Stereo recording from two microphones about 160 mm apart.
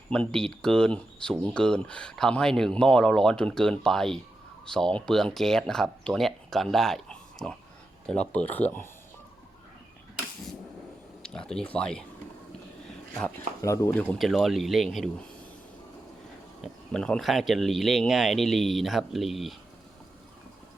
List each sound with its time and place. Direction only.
0.1 s speech: 5° left (ahead or behind)
11.2 s speech: 5° left (ahead or behind)
13.6 s speech: 20° left (ahead or behind)
14.2 s speech: centre (ahead or behind)
16.6 s speech: 5° left (ahead or behind)